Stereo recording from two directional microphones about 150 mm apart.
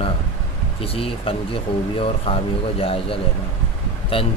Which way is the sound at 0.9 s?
40° left (ahead or behind).